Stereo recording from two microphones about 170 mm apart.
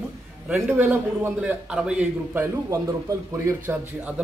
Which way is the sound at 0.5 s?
10° right (ahead or behind).